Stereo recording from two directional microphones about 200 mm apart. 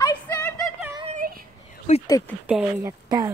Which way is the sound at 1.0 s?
40° right (ahead or behind).